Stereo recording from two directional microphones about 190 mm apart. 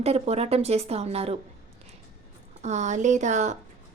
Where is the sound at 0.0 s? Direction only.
35° right (ahead or behind).